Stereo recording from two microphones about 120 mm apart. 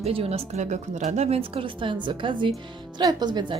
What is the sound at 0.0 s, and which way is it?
Speech, 55° right (ahead or behind).